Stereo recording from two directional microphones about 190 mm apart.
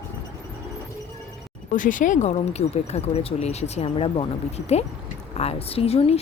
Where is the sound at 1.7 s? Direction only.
45° left (ahead or behind).